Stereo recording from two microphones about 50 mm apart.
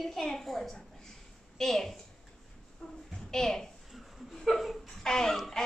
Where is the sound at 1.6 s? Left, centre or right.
Centre.